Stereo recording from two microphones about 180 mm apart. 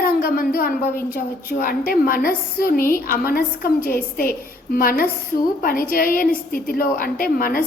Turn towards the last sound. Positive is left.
turn(degrees=55)  # may be behind; listen again after turning